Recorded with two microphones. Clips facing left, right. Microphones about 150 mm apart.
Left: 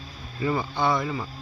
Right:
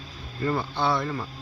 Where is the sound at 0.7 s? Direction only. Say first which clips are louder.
Left 2 dB; 15° left (ahead or behind).